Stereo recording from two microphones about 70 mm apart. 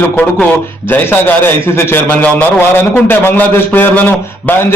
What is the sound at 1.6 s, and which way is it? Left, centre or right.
A man's voice, left.